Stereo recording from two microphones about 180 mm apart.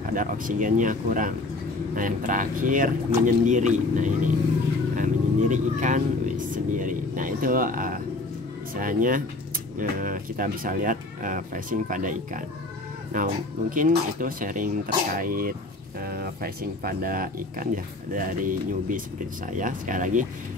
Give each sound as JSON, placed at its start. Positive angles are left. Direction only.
{"t": 0.1, "sound": "speech", "side_deg": -50}